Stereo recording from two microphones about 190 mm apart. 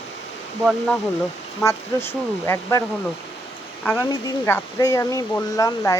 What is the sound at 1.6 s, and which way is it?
Speech, 15° left (ahead or behind).